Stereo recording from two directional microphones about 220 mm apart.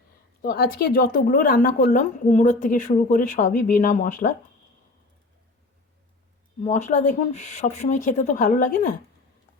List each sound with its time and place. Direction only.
0.4 s a woman's voice: 40° left (ahead or behind)
6.6 s a woman's voice: 35° left (ahead or behind)